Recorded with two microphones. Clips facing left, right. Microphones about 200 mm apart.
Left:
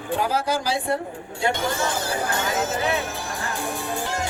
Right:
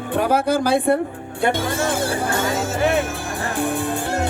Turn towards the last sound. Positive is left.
turn(degrees=-60)  # may be behind; listen again after turning